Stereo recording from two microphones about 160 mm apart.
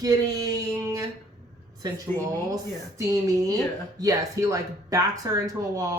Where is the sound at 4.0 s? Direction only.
20° right (ahead or behind).